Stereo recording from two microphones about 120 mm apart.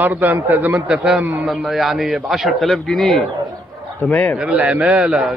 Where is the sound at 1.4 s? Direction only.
Centre (ahead or behind).